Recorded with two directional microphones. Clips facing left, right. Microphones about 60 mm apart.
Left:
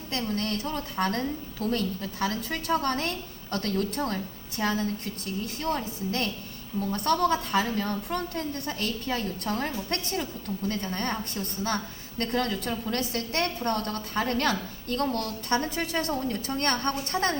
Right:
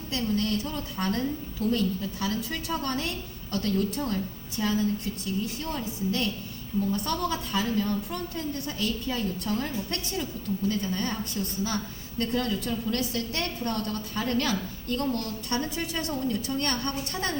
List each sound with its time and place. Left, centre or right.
0.1 s a woman's voice: left